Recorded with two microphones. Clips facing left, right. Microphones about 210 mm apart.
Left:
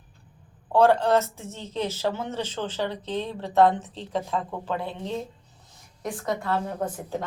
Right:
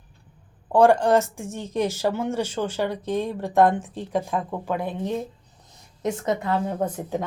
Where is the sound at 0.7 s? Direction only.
15° right (ahead or behind).